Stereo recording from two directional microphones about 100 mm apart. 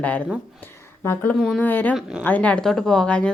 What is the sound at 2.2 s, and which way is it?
Speech, 15° left (ahead or behind).